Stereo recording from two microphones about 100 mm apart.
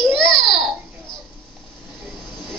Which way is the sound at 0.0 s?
Centre (ahead or behind).